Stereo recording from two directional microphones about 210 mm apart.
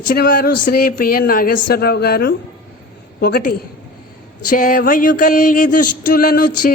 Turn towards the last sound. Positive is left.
turn(degrees=45)  # may be behind; listen again after turning